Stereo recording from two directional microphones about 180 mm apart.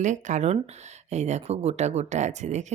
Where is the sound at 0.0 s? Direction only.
40° right (ahead or behind).